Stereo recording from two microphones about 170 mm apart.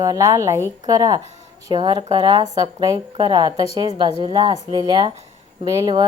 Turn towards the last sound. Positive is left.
turn(degrees=-25)  # may be behind; listen again after turning